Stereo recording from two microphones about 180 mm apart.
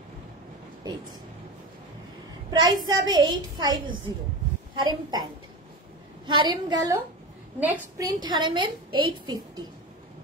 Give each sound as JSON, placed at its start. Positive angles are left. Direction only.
{"t": 2.6, "sound": "a woman's voice", "side_deg": -20}
{"t": 6.2, "sound": "a woman's voice", "side_deg": -25}
{"t": 7.6, "sound": "a woman's voice", "side_deg": -10}
{"t": 8.2, "sound": "a woman's voice", "side_deg": -25}